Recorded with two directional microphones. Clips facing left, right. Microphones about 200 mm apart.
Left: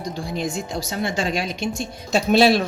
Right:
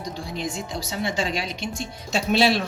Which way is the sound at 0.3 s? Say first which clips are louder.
Left 4 dB; 45° left (ahead or behind).